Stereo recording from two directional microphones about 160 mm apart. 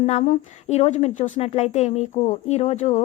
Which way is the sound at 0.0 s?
45° left (ahead or behind).